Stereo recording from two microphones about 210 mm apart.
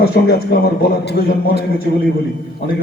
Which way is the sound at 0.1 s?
50° left (ahead or behind).